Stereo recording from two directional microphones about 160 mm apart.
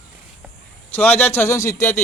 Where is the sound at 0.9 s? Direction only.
15° left (ahead or behind).